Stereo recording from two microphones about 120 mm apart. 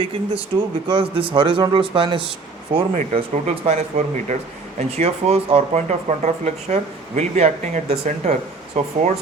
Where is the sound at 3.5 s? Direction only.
60° right (ahead or behind); by 4.4 s 75° right (ahead or behind).